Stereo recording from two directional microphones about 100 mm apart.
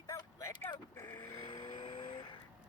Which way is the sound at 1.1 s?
45° left (ahead or behind).